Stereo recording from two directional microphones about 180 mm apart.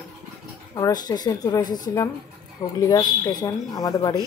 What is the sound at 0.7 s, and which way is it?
Speech, 20° left (ahead or behind).